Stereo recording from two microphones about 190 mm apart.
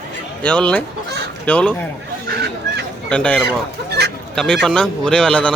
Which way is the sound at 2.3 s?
55° right (ahead or behind).